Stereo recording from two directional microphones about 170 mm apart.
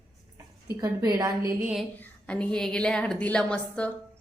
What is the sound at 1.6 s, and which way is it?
Speech, 5° right (ahead or behind).